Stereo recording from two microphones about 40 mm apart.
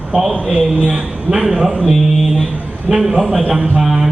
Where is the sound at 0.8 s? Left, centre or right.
Right.